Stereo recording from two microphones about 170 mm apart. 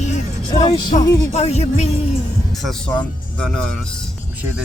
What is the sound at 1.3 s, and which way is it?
Music, 40° left (ahead or behind).